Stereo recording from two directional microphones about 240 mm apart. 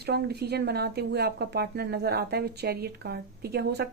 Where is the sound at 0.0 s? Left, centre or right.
Right.